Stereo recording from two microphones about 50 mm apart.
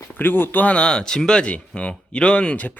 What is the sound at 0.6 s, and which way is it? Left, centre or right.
Speech, left.